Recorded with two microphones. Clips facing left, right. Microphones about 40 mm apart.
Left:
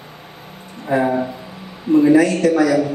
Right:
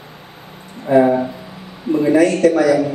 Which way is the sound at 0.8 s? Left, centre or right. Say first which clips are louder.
Right 5 dB; centre.